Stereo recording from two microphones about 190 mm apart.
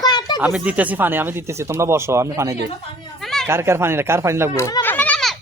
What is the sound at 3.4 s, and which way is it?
Speech, 15° right (ahead or behind).